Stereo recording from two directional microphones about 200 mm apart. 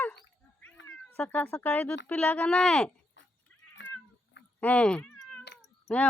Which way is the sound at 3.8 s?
60° left (ahead or behind).